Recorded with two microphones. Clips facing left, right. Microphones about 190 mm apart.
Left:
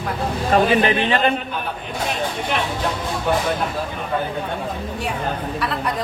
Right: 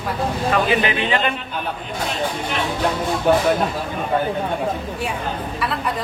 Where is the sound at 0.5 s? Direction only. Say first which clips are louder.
Left 5 dB; 35° left (ahead or behind).